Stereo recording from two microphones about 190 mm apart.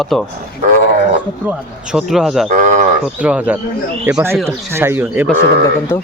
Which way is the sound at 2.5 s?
45° right (ahead or behind).